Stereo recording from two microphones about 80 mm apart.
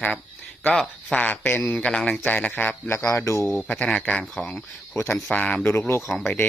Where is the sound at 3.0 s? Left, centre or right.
Left.